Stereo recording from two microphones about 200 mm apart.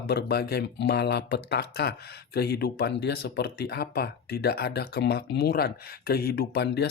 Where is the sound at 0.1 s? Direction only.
55° left (ahead or behind).